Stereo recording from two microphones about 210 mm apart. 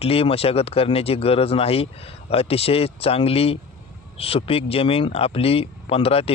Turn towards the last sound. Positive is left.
turn(degrees=25)  # may be behind; listen again after turning